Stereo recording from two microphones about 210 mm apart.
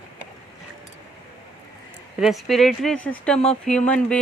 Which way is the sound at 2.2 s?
Centre (ahead or behind).